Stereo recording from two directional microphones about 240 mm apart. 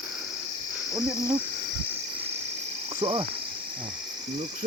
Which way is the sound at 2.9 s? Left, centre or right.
Right.